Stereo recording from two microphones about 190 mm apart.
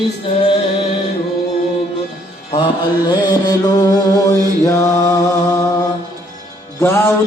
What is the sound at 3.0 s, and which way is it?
Mantra, 20° left (ahead or behind).